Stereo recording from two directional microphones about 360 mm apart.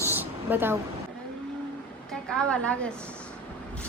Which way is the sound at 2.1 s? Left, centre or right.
Centre.